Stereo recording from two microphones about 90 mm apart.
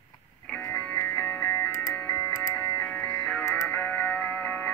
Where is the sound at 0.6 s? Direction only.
20° left (ahead or behind).